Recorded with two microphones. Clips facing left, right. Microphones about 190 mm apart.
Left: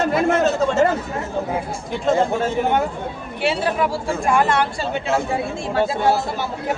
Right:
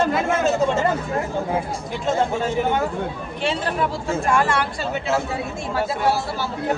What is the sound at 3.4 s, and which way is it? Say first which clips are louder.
Speech: left 3 dB; 10° left (ahead or behind).